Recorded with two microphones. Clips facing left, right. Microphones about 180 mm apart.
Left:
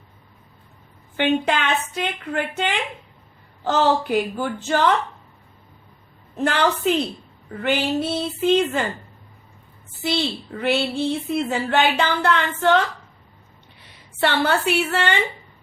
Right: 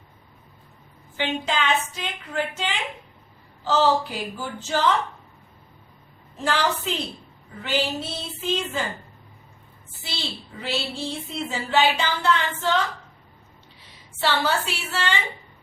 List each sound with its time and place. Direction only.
1.1 s a woman's voice: 60° left (ahead or behind)
6.3 s a woman's voice: 55° left (ahead or behind)
10.0 s a woman's voice: 60° left (ahead or behind)
14.2 s a woman's voice: 60° left (ahead or behind)